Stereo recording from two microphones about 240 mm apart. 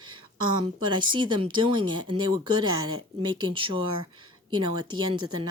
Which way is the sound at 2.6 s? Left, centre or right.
Right.